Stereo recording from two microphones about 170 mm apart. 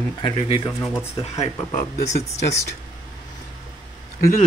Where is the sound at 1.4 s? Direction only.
40° left (ahead or behind).